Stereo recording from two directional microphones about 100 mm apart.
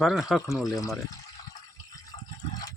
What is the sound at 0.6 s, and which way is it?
Speech, 35° left (ahead or behind).